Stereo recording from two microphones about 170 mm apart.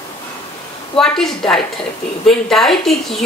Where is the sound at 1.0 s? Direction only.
5° left (ahead or behind).